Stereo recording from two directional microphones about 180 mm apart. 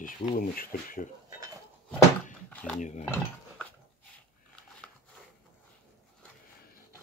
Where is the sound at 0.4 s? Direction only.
50° left (ahead or behind).